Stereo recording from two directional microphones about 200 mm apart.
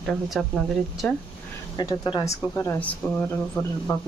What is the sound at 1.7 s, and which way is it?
Speech, 20° left (ahead or behind).